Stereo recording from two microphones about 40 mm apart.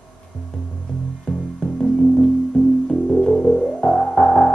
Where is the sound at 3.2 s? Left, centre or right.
Centre.